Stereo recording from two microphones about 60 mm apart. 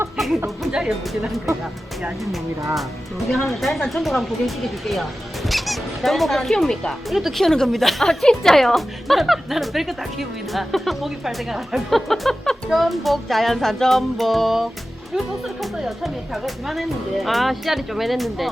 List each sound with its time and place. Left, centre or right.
0.2 s chatter: centre
0.7 s speech: centre
3.2 s speech: centre